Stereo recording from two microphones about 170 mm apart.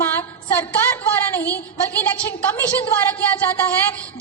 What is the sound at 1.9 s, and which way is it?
Speech, 10° left (ahead or behind).